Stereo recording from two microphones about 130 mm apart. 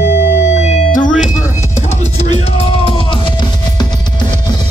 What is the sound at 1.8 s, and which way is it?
Music, 60° left (ahead or behind).